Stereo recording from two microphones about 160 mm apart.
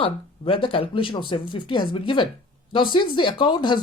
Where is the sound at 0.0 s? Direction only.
35° left (ahead or behind).